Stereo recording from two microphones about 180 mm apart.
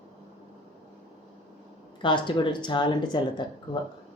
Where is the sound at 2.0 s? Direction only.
25° left (ahead or behind).